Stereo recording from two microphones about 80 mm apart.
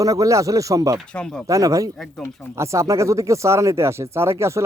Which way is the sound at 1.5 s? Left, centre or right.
Right.